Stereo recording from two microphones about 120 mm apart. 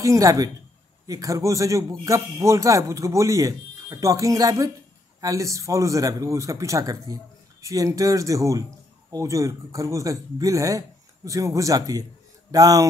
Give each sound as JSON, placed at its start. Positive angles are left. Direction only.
{"t": 0.0, "sound": "a man's voice", "side_deg": -25}